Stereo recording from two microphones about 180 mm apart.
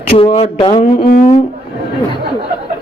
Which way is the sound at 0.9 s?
50° left (ahead or behind).